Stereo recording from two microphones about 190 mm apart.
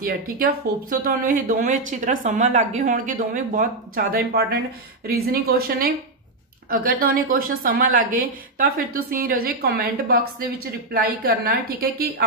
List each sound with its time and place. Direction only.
0.0 s speech: 50° right (ahead or behind)